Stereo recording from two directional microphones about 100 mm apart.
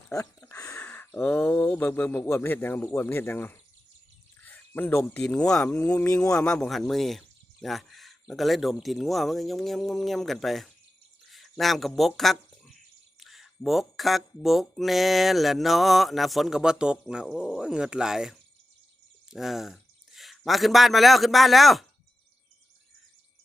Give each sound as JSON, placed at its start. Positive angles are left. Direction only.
{"t": 0.1, "sound": "speech", "side_deg": 35}
{"t": 0.7, "sound": "speech", "side_deg": 15}
{"t": 4.4, "sound": "a sound", "side_deg": 15}
{"t": 5.2, "sound": "speech", "side_deg": 10}
{"t": 11.3, "sound": "a sound", "side_deg": 0}
{"t": 13.7, "sound": "speech", "side_deg": 0}